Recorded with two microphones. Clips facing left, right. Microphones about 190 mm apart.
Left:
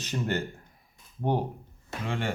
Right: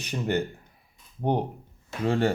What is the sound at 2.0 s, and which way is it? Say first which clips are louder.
Speech: right 9 dB; 35° right (ahead or behind).